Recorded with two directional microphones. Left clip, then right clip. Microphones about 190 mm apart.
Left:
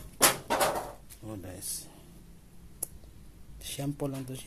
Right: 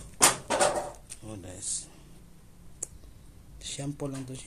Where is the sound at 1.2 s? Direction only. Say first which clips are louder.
Left 2 dB; 20° left (ahead or behind).